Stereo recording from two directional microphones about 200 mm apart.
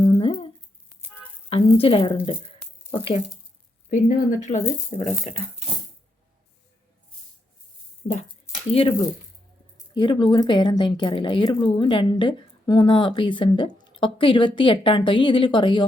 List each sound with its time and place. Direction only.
0.0 s a sound: 25° left (ahead or behind)
1.5 s speech: 30° left (ahead or behind)
3.8 s speech: 40° left (ahead or behind)
8.7 s speech: 30° left (ahead or behind)